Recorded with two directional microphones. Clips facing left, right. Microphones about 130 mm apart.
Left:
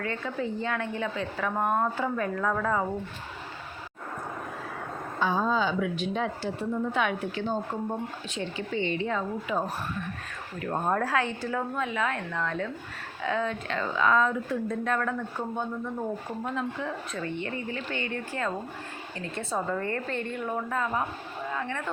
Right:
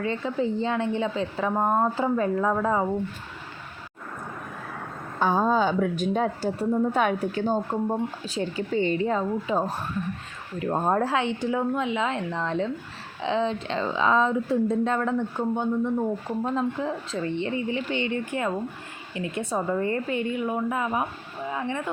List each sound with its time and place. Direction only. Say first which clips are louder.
0.0 s a woman's voice: right 5 dB; 25° right (ahead or behind)
5.2 s a woman's voice: right 4 dB; 45° right (ahead or behind); by 17.5 s 30° right (ahead or behind)
17.7 s a woman's voice: right 6 dB; 20° right (ahead or behind)